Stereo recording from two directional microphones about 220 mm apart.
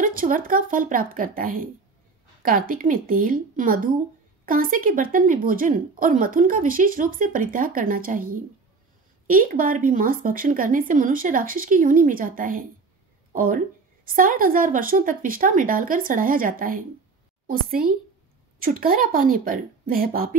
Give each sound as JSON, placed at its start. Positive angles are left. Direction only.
{"t": 0.0, "sound": "speech", "side_deg": -40}
{"t": 9.3, "sound": "speech", "side_deg": -40}
{"t": 18.6, "sound": "speech", "side_deg": -40}